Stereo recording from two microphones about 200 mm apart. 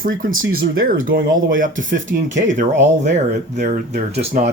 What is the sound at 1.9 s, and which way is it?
Speech, 70° right (ahead or behind).